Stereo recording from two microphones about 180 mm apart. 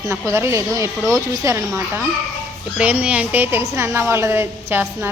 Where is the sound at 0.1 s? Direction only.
15° right (ahead or behind).